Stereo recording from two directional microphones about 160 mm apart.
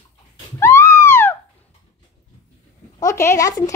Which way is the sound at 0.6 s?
15° left (ahead or behind).